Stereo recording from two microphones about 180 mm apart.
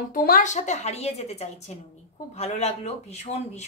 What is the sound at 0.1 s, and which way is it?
A woman's voice, 55° left (ahead or behind).